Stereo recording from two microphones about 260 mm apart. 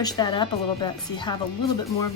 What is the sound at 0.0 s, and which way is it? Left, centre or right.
Speech, centre.